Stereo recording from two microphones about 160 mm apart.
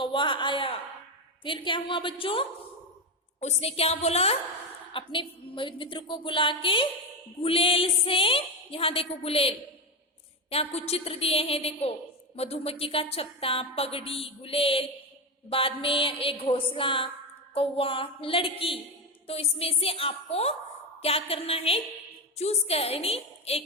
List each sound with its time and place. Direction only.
0.0 s a woman's voice: 30° left (ahead or behind)